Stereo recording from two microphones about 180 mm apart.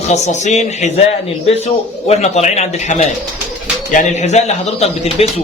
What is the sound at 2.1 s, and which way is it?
Speech, 35° left (ahead or behind).